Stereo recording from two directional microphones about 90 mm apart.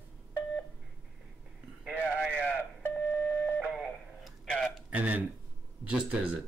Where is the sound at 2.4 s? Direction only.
20° left (ahead or behind).